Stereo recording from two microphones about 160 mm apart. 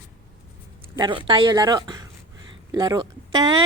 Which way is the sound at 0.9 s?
30° right (ahead or behind).